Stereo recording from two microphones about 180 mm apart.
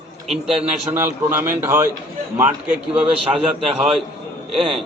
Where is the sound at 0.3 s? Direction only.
Centre (ahead or behind).